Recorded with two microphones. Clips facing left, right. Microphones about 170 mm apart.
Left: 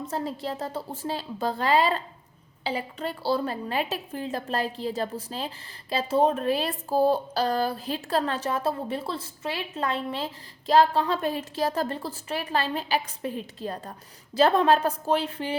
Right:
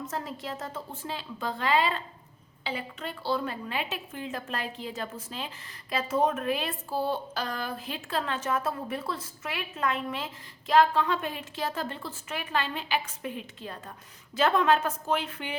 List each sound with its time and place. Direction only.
0.0 s a woman's voice: 30° left (ahead or behind)